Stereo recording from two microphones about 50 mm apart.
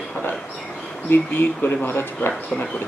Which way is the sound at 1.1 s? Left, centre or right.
Left.